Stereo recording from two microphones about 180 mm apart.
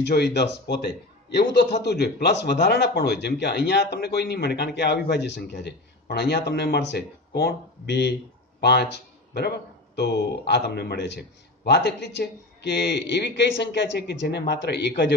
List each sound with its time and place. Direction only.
0.0 s a man's voice: 70° left (ahead or behind)
8.5 s a sound: 65° left (ahead or behind)
9.9 s a man's voice: 65° left (ahead or behind)